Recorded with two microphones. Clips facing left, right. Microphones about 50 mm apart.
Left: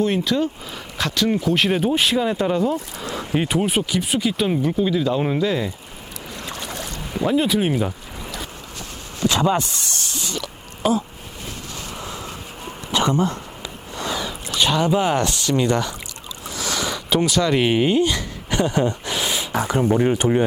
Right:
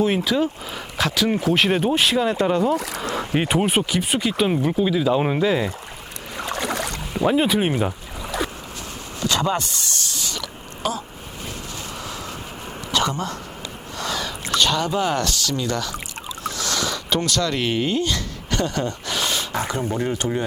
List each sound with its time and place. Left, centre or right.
0.0 s speech: centre
3.3 s speech: right
3.8 s speech: centre
6.4 s boat: right
6.7 s boat: right
7.3 s speech: right
9.2 s a sound: centre
10.8 s speech: centre
11.9 s a sound: left
12.9 s speech: left
13.9 s a sound: centre
14.5 s speech: centre
16.4 s a sound: centre
19.5 s speech: left